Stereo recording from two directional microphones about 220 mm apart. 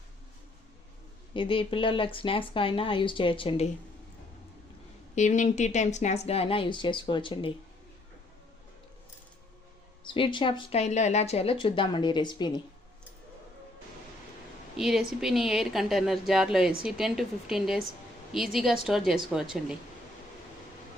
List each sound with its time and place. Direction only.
1.3 s speech: 25° left (ahead or behind)
5.1 s speech: 35° left (ahead or behind)
10.0 s speech: 20° left (ahead or behind)
14.8 s speech: centre (ahead or behind)